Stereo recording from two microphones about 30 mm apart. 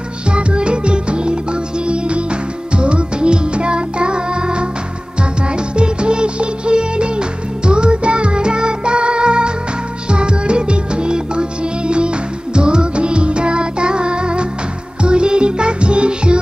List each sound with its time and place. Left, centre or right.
0.3 s music: right
5.8 s music: right
12.5 s music: right